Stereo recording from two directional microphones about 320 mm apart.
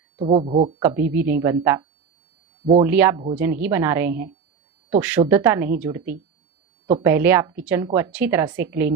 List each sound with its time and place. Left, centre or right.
0.2 s speech: centre
0.8 s a woman's voice: centre